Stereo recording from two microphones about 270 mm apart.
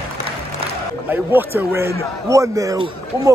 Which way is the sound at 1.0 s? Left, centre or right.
Centre.